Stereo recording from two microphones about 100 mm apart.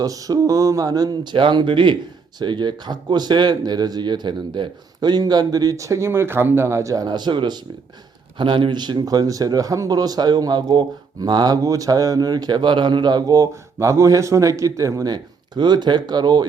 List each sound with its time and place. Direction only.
0.0 s a man's voice: 35° right (ahead or behind)